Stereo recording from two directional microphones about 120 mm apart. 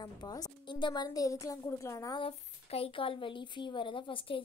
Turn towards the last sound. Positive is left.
turn(degrees=45)  # may be behind; listen again after turning